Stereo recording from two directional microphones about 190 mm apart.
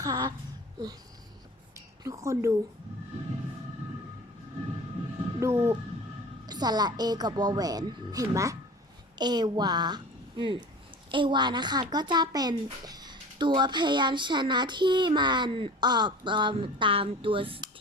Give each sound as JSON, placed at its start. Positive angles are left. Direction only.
{"t": 0.0, "sound": "speech", "side_deg": -20}
{"t": 2.0, "sound": "a woman's voice", "side_deg": -15}
{"t": 5.4, "sound": "a woman's voice", "side_deg": -15}